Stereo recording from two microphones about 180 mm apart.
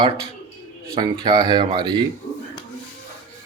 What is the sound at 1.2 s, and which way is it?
Speech, 25° right (ahead or behind).